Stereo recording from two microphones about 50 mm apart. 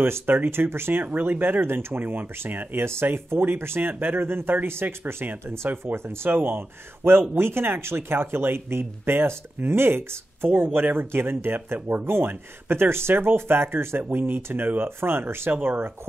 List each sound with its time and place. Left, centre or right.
0.0 s speech: right
2.0 s speech: right